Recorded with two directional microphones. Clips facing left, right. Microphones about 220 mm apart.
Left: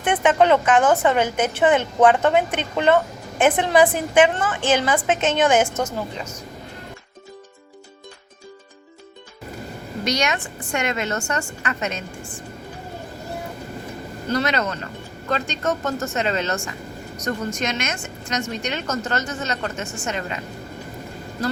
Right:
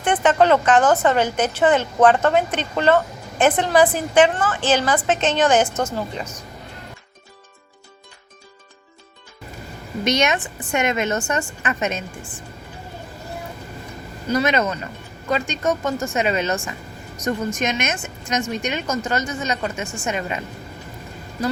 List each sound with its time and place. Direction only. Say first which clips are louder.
0.0 s a woman's voice: right 1 dB; 10° left (ahead or behind)
10.0 s a woman's voice: right 3 dB; 20° right (ahead or behind)
14.4 s a woman's voice: right 3 dB; 20° right (ahead or behind)